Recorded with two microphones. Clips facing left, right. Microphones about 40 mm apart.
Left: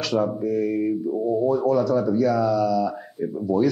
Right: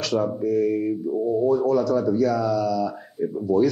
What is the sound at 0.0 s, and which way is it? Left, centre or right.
Speech, centre.